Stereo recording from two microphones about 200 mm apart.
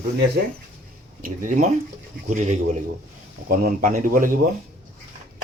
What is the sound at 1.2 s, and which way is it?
Speech, 40° right (ahead or behind).